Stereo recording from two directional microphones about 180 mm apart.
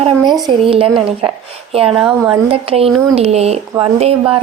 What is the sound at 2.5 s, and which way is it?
Speech, 30° right (ahead or behind).